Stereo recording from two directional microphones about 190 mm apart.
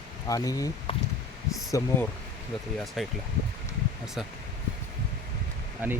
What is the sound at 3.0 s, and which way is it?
Speech, centre (ahead or behind).